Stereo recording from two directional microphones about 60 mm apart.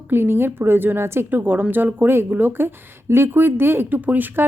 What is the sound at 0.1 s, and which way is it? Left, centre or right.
A woman's voice, right.